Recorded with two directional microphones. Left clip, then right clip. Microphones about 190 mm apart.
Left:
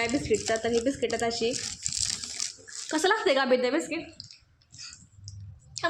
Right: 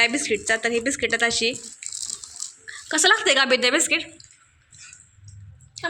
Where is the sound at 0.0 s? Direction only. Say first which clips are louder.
Right 6 dB; 10° left (ahead or behind).